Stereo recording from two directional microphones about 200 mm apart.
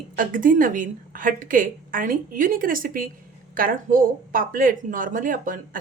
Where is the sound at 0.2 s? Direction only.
45° right (ahead or behind).